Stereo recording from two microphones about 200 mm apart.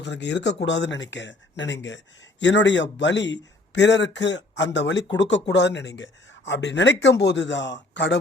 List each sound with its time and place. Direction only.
0.0 s speech: 60° left (ahead or behind)